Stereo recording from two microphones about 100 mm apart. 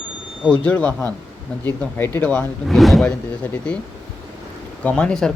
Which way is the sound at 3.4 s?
20° left (ahead or behind).